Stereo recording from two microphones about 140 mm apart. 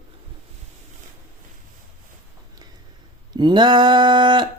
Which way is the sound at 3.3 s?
30° right (ahead or behind).